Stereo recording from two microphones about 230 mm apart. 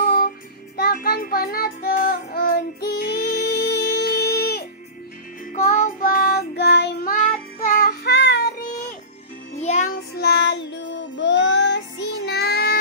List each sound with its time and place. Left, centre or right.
0.0 s music: left
0.7 s child singing: left
9.6 s music: left
10.1 s child singing: left